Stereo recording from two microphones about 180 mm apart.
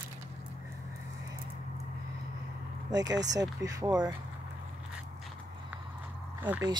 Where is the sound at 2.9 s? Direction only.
20° right (ahead or behind).